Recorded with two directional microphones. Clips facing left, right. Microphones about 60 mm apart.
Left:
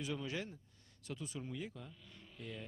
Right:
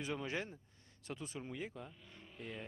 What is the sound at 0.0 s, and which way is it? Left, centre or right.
Speech, right.